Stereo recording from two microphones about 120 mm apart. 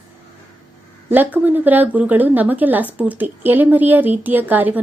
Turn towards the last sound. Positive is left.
turn(degrees=-15)  # may be behind; listen again after turning